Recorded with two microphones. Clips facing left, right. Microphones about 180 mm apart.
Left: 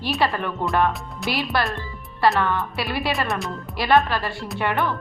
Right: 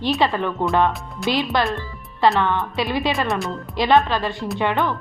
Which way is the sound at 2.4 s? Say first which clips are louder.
Right 2 dB; 20° right (ahead or behind).